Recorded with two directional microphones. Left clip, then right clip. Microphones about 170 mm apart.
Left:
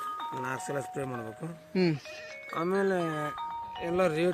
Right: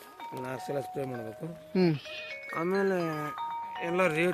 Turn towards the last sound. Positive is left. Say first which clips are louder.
# even
turn(degrees=5)  # may be behind; listen again after turning